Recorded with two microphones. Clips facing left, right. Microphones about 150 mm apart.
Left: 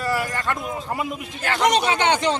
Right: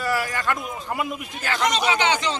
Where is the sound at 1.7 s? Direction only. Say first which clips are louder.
Left 3 dB; 60° left (ahead or behind).